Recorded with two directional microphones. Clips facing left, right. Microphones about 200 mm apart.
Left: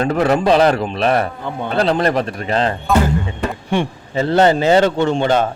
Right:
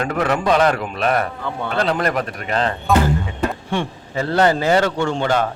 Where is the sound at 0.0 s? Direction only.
30° left (ahead or behind).